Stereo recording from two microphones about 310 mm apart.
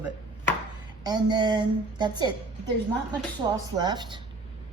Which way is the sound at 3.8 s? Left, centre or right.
Centre.